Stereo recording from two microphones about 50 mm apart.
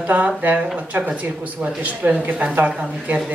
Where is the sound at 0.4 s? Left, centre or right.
Right.